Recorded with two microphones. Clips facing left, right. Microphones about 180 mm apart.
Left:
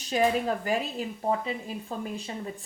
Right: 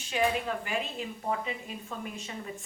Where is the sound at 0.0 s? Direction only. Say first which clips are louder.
Left 4 dB; 40° left (ahead or behind).